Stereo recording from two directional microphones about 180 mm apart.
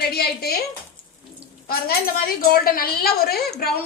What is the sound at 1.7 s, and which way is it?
A woman's voice, 55° left (ahead or behind).